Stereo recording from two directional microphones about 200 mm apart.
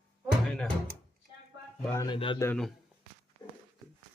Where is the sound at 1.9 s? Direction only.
20° left (ahead or behind).